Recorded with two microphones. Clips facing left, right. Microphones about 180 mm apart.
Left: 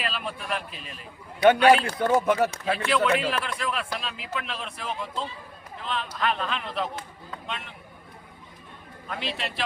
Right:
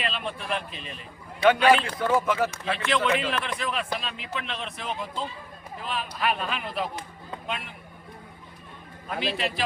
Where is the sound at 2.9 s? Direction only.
Centre (ahead or behind).